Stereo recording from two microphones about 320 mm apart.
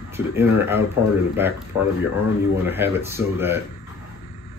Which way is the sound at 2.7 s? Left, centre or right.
Centre.